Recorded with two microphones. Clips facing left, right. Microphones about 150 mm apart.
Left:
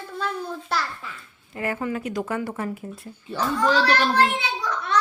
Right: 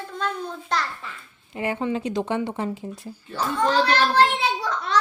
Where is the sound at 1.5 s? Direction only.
20° right (ahead or behind).